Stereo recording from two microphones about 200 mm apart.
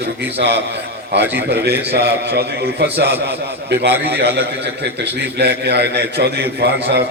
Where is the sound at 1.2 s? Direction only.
10° right (ahead or behind).